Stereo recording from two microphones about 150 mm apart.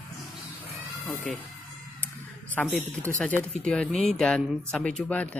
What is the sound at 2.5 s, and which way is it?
A man's voice, 10° left (ahead or behind).